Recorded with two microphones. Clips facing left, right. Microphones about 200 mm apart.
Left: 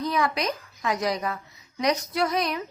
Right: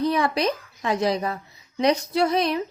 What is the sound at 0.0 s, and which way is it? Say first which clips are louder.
A woman's voice: right 4 dB; 30° right (ahead or behind).